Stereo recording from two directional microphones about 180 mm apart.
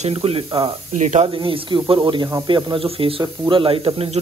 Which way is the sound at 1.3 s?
30° right (ahead or behind).